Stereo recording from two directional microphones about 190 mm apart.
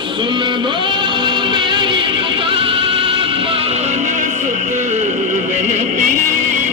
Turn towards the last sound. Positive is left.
turn(degrees=-40)  # may be behind; listen again after turning